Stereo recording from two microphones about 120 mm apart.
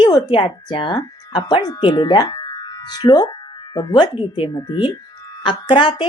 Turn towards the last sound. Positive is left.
turn(degrees=40)  # may be behind; listen again after turning